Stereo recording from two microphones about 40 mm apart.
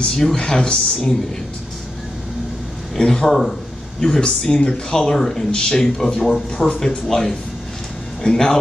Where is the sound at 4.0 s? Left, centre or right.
Centre.